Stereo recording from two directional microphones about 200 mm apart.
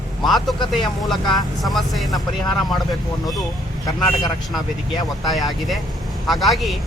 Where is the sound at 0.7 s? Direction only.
Centre (ahead or behind).